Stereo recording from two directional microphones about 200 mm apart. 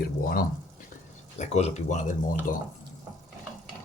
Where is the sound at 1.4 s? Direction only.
35° left (ahead or behind).